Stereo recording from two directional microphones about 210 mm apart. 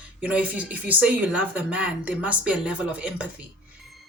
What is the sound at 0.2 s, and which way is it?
Speech, 5° right (ahead or behind).